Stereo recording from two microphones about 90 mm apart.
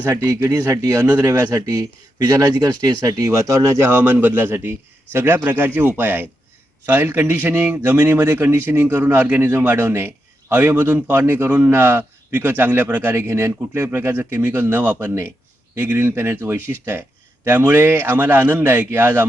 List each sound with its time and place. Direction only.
0.1 s a man's voice: 35° right (ahead or behind)